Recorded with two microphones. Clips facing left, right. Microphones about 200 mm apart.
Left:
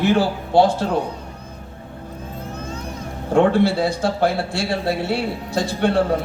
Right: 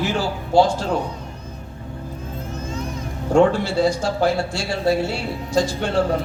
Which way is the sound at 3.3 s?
55° left (ahead or behind).